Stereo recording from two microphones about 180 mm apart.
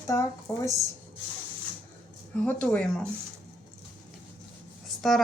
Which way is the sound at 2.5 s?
5° left (ahead or behind).